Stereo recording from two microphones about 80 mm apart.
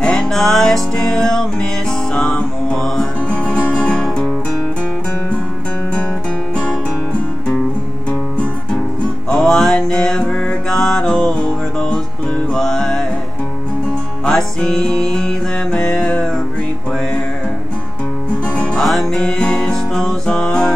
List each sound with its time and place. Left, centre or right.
0.0 s music: centre
6.5 s music: centre
9.3 s music: centre
14.2 s music: centre
18.3 s music: centre
18.8 s music: centre